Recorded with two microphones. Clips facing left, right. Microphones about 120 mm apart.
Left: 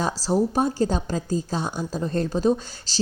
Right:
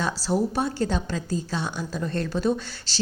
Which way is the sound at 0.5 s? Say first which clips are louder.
Left 3 dB; 40° left (ahead or behind).